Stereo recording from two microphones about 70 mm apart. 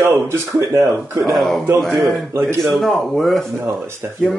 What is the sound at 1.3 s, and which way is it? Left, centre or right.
A man's voice, centre.